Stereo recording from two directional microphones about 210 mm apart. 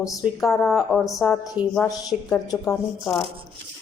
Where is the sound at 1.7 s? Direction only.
15° left (ahead or behind).